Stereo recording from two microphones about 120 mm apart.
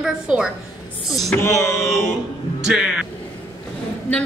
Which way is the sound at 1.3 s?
20° left (ahead or behind).